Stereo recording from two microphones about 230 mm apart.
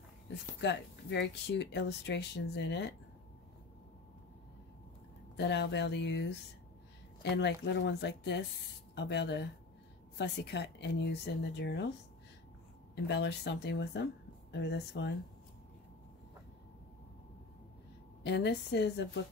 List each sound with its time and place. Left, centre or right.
0.6 s speech: left
5.4 s speech: left
7.3 s speech: left
12.9 s speech: left
18.2 s speech: left